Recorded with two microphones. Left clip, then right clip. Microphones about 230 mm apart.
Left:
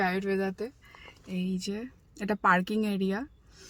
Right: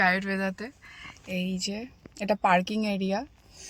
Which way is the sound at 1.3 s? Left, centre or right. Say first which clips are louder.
Right 4 dB; left.